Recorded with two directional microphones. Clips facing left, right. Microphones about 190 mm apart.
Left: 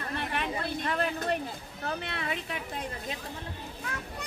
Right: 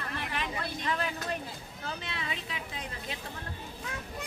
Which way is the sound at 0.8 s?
55° left (ahead or behind).